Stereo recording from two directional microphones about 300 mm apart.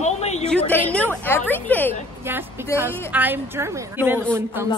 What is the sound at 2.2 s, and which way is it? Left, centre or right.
A woman's voice, centre.